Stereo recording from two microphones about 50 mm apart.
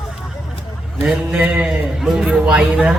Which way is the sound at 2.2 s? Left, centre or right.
Centre.